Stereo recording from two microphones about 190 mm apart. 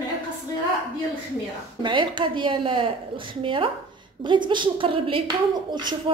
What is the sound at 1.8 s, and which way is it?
A woman's voice, 25° right (ahead or behind).